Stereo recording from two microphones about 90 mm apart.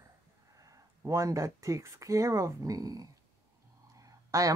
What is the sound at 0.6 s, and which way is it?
Speech, 35° right (ahead or behind).